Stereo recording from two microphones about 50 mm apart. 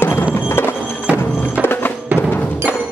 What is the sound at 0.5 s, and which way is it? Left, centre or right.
Music, left.